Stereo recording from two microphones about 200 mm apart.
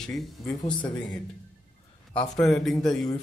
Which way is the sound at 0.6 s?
20° left (ahead or behind).